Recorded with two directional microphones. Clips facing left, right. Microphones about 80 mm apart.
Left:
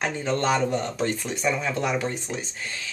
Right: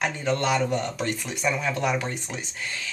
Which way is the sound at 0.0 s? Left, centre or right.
Left.